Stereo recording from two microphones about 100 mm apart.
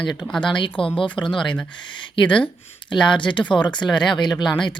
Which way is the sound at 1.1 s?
50° left (ahead or behind).